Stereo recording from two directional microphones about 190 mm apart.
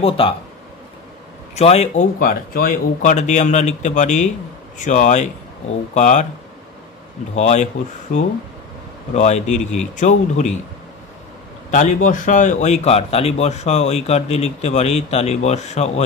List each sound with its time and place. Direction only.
1.5 s speech: 35° left (ahead or behind)
7.3 s speech: 35° left (ahead or behind)
9.1 s speech: 35° left (ahead or behind)
11.7 s speech: 40° left (ahead or behind)